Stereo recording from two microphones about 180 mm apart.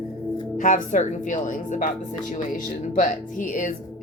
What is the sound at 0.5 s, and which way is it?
Speech, 45° left (ahead or behind).